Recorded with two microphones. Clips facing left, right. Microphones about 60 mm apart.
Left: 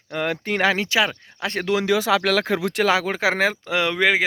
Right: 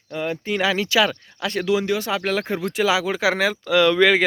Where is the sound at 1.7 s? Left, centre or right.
Left.